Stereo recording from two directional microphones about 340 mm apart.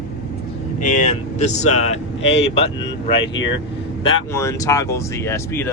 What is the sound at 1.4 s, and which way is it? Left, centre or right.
Speech, centre.